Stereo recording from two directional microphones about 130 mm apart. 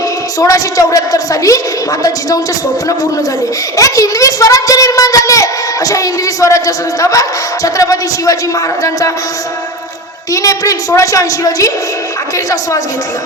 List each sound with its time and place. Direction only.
0.3 s a woman's voice: 25° left (ahead or behind)
3.8 s a woman's voice: 25° left (ahead or behind)
10.3 s a woman's voice: 25° left (ahead or behind)